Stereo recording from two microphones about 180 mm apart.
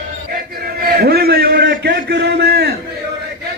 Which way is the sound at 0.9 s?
60° right (ahead or behind).